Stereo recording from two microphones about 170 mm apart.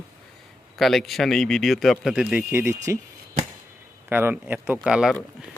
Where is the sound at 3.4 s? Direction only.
50° right (ahead or behind).